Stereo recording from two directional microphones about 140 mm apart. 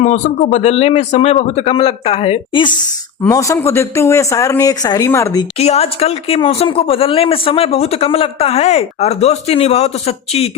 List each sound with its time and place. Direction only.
0.3 s speech: 55° left (ahead or behind); by 2.7 s 35° left (ahead or behind)
3.2 s a woman's voice: 20° left (ahead or behind)
5.5 s speech: 45° left (ahead or behind)